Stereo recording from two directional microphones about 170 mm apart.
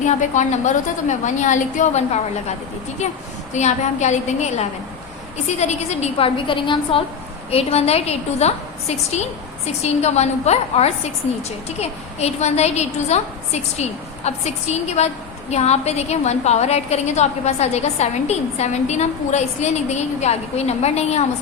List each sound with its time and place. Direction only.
0.0 s a woman's voice: 45° left (ahead or behind)
3.5 s a woman's voice: 40° left (ahead or behind)